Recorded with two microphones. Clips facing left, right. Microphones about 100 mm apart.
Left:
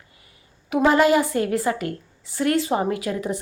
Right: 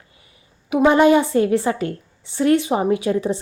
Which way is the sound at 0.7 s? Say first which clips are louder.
Right 4 dB; 20° right (ahead or behind).